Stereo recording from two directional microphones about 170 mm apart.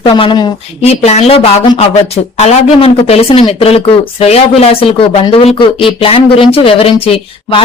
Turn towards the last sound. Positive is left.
turn(degrees=35)  # may be behind; listen again after turning